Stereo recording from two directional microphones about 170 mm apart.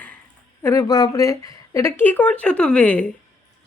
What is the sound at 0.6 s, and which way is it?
Speech, 20° left (ahead or behind).